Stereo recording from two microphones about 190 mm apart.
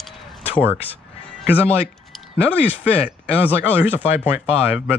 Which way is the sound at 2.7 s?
10° right (ahead or behind).